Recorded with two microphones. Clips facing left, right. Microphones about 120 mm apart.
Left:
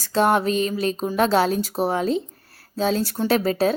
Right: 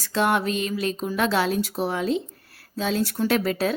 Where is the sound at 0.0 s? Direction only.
35° left (ahead or behind).